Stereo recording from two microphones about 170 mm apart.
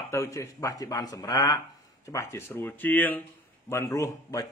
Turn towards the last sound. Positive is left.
turn(degrees=20)  # may be behind; listen again after turning